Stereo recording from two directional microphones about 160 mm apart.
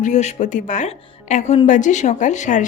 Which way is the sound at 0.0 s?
45° left (ahead or behind).